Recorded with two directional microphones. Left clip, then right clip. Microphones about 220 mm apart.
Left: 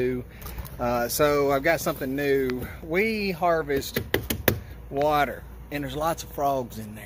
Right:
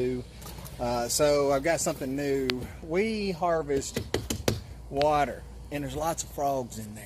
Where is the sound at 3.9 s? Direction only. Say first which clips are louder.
Left 5 dB; 20° left (ahead or behind).